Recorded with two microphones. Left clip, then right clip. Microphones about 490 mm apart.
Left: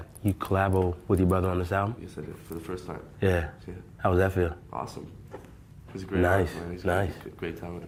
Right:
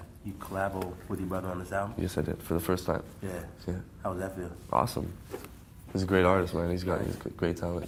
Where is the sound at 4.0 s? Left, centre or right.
Left.